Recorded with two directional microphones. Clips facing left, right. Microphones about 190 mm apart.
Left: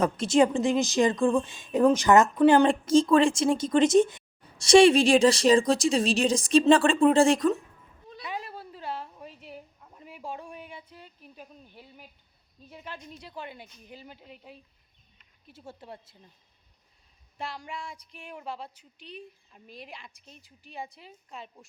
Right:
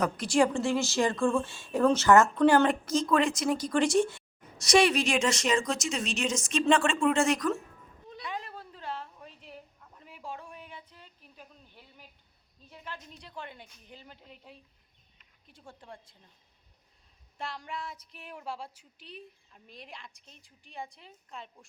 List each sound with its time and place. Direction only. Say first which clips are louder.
0.0 s a woman's voice: left 4 dB; 25° left (ahead or behind)
2.6 s speech: left 6 dB; 30° left (ahead or behind)
8.2 s a sound: left 2 dB; 10° left (ahead or behind)
12.6 s a woman's voice: left 3 dB; 15° left (ahead or behind)
17.3 s speech: left 1 dB; centre (ahead or behind)